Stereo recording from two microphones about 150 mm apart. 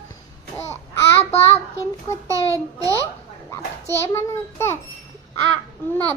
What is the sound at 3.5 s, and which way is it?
A child's voice, 20° left (ahead or behind).